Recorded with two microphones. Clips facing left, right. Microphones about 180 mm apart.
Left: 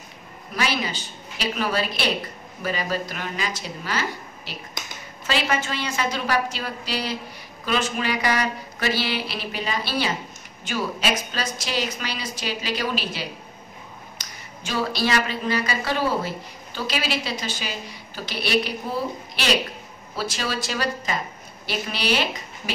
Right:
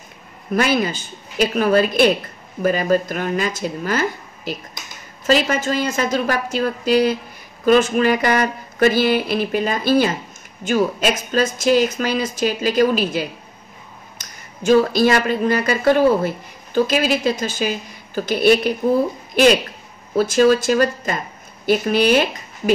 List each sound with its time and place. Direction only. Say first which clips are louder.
0.6 s speech: right 8 dB; 50° right (ahead or behind)